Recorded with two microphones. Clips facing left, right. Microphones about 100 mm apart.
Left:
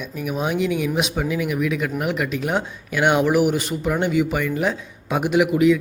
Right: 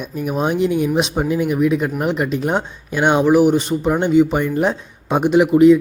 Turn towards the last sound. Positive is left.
turn(degrees=-30)  # may be behind; listen again after turning